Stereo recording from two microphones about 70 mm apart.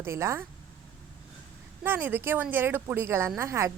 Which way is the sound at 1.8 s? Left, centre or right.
Right.